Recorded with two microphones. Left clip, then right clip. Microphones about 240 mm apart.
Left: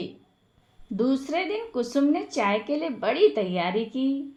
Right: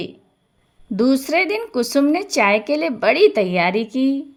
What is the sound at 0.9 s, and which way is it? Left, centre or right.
Speech, right.